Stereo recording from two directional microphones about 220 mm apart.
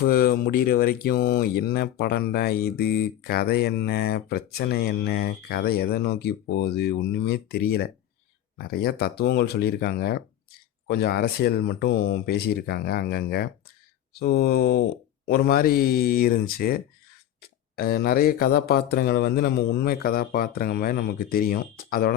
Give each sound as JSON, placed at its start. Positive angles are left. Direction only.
{"t": 0.0, "sound": "speech", "side_deg": 45}